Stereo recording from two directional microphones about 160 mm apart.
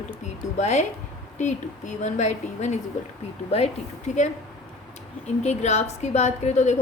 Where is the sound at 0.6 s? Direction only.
45° left (ahead or behind).